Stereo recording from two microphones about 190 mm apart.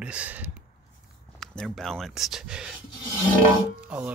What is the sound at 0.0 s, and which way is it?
Speech, 5° right (ahead or behind).